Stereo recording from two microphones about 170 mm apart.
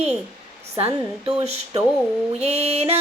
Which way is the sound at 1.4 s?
40° right (ahead or behind).